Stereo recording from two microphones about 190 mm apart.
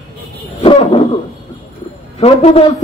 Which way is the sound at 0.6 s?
30° left (ahead or behind).